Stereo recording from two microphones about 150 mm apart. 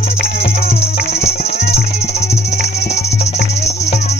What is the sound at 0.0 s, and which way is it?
Music, 45° left (ahead or behind).